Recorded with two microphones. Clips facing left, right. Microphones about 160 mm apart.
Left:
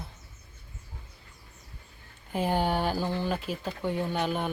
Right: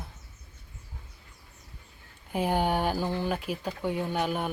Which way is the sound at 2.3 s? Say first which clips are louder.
Right 1 dB; 10° right (ahead or behind).